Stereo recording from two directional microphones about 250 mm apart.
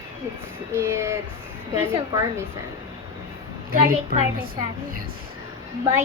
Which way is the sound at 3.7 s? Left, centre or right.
Right.